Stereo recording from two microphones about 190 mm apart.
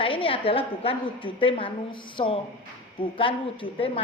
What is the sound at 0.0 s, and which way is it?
A woman's voice, 30° left (ahead or behind).